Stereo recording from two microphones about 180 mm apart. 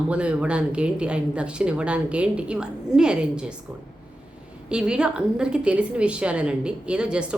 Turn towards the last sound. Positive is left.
turn(degrees=-5)  # may be behind; listen again after turning